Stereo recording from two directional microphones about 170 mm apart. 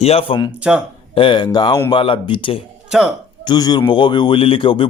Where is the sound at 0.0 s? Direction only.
35° left (ahead or behind).